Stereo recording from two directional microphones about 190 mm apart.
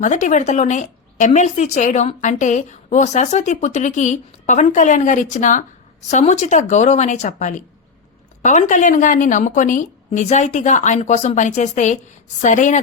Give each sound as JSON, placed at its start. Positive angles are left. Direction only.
{"t": 0.0, "sound": "a woman's voice", "side_deg": 40}